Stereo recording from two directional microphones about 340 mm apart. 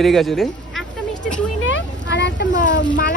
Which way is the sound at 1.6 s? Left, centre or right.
Left.